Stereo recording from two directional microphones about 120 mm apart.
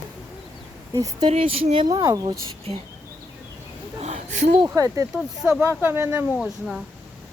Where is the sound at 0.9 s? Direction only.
30° right (ahead or behind).